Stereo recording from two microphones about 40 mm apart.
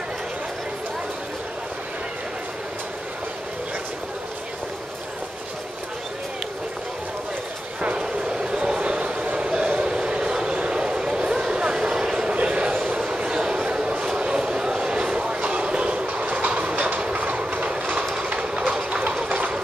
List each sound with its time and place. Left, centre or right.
7.8 s train: right
8.7 s a sound: right
9.8 s vehicle: right
12.4 s a sound: right
15.4 s train: right
17.1 s train: right
18.7 s train: right